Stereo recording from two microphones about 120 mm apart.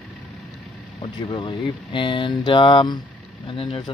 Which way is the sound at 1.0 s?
45° left (ahead or behind).